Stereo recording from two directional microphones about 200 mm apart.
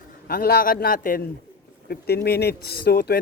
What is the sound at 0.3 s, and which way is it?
A man's voice, 50° left (ahead or behind).